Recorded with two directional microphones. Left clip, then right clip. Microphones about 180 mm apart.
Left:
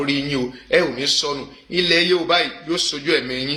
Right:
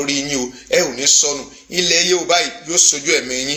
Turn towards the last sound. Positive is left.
turn(degrees=15)  # may be behind; listen again after turning